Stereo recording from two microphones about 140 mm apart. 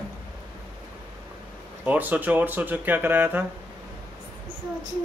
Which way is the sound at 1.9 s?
15° right (ahead or behind).